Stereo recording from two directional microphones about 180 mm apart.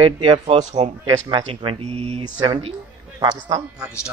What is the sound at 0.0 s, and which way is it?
A man's voice, 30° right (ahead or behind).